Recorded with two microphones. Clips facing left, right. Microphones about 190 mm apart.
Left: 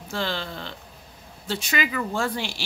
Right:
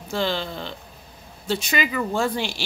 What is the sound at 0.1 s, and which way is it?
Speech, 15° right (ahead or behind).